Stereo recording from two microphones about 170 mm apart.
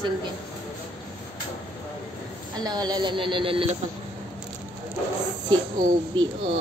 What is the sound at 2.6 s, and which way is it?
A woman's voice, 25° right (ahead or behind).